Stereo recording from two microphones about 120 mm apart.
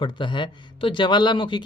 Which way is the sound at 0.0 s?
40° left (ahead or behind).